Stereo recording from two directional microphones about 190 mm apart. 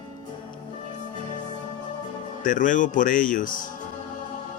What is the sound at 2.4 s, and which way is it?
Speech, 45° left (ahead or behind).